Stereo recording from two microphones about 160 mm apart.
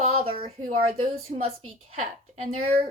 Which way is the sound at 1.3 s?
50° right (ahead or behind).